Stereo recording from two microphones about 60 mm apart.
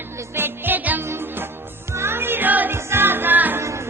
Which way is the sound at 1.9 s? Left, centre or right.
Right.